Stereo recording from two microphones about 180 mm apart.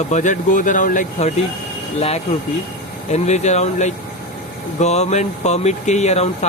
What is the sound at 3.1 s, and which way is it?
Speech, 40° left (ahead or behind).